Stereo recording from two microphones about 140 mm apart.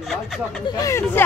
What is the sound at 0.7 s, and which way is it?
Speech, 20° left (ahead or behind).